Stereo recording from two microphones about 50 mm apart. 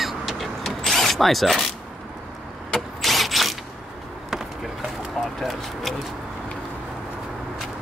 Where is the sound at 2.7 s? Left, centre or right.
Centre.